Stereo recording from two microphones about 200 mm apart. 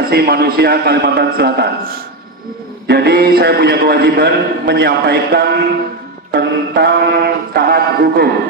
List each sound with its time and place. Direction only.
0.1 s a man's voice: 55° right (ahead or behind)
2.9 s a man's voice: 55° right (ahead or behind)
6.3 s music: 55° right (ahead or behind)